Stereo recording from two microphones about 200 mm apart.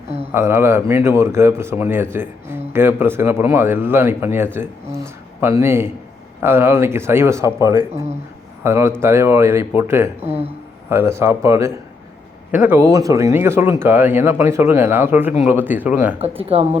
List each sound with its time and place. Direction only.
0.3 s speech: 15° right (ahead or behind)
10.2 s speech: 30° right (ahead or behind)
10.8 s speech: 15° right (ahead or behind)
16.4 s speech: 30° right (ahead or behind)